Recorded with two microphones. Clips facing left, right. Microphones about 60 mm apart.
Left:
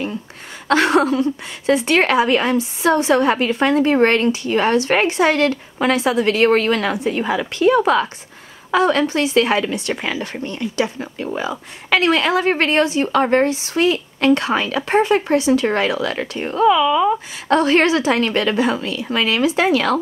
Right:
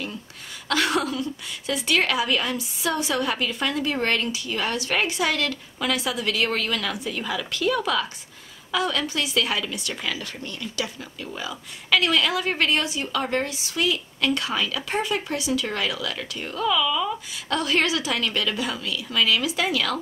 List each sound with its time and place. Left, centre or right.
0.7 s a woman's voice: left